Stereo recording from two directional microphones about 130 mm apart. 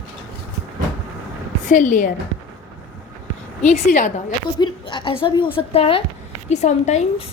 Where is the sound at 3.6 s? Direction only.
60° left (ahead or behind).